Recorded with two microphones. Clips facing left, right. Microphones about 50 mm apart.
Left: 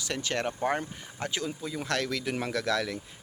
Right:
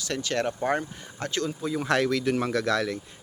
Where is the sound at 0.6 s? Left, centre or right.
Centre.